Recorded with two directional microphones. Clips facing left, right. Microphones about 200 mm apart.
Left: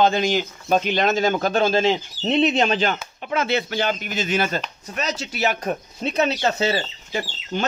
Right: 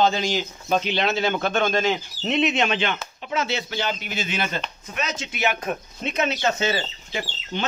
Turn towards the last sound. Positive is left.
turn(degrees=40)  # may be behind; listen again after turning